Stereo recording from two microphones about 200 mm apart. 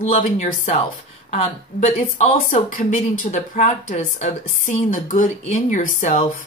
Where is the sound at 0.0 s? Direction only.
40° left (ahead or behind).